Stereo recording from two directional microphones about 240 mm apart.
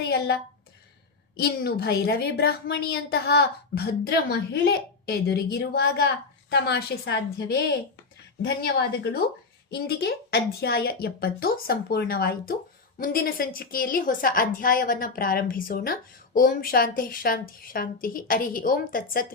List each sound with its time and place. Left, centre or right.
0.0 s a sound: left
1.4 s a woman's voice: left
8.6 s a woman's voice: left